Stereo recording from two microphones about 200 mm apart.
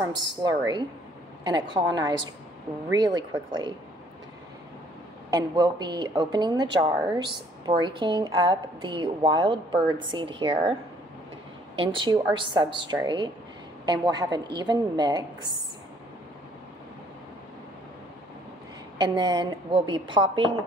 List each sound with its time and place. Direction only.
0.1 s a woman's voice: 20° right (ahead or behind)
5.3 s a woman's voice: 20° right (ahead or behind)
11.7 s a woman's voice: 25° right (ahead or behind)
18.9 s a woman's voice: 20° right (ahead or behind)